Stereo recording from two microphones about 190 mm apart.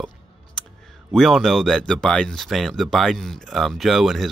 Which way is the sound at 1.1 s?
Centre (ahead or behind).